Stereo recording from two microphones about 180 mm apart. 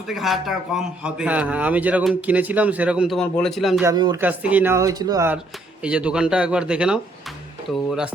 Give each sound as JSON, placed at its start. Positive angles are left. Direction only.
{"t": 0.1, "sound": "a man's voice", "side_deg": 0}
{"t": 3.8, "sound": "speech", "side_deg": -25}
{"t": 4.2, "sound": "a man's voice", "side_deg": -10}
{"t": 5.8, "sound": "speech", "side_deg": -5}